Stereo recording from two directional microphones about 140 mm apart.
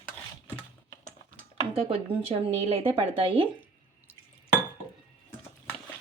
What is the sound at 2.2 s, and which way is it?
Speech, 45° right (ahead or behind).